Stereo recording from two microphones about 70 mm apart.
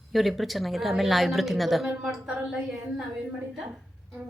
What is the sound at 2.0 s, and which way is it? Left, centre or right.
Speech, centre.